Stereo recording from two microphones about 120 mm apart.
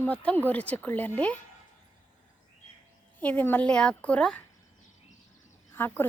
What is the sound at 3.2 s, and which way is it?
A woman's voice, 15° left (ahead or behind).